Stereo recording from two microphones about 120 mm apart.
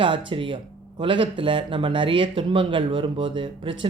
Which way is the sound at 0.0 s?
45° right (ahead or behind).